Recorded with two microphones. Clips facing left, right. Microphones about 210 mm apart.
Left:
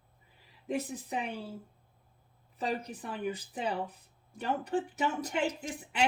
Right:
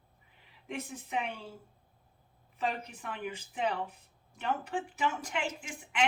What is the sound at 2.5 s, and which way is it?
Speech, 35° left (ahead or behind).